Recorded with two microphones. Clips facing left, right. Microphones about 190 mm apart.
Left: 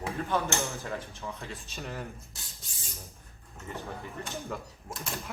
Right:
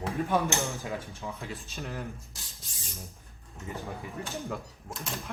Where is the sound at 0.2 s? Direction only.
15° right (ahead or behind).